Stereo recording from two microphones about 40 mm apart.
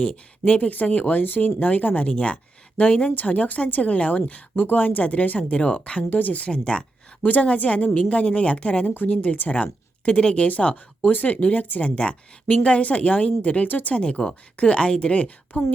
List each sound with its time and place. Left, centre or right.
0.0 s speech: left
0.6 s speech: left
2.0 s speech: left
4.5 s speech: left
6.1 s speech: left
6.5 s speech: left
7.2 s speech: left
11.8 s speech: left
13.7 s speech: left
13.9 s speech: left